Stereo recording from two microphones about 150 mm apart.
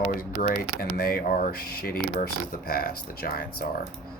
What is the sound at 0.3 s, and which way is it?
Speech, 70° left (ahead or behind).